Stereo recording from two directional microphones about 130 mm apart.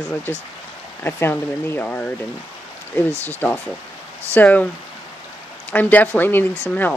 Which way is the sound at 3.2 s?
15° left (ahead or behind).